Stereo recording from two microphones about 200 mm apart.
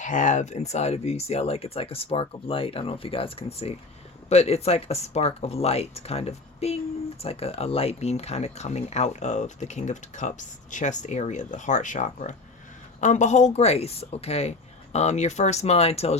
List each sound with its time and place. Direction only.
0.0 s speech: 40° left (ahead or behind)